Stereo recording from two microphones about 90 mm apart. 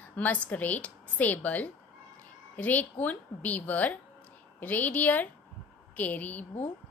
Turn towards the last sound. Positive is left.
turn(degrees=20)  # may be behind; listen again after turning